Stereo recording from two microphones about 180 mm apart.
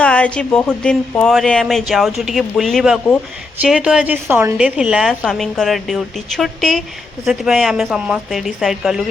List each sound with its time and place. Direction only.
0.0 s a woman's voice: 5° left (ahead or behind)